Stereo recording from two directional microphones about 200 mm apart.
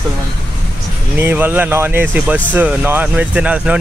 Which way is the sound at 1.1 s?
10° right (ahead or behind).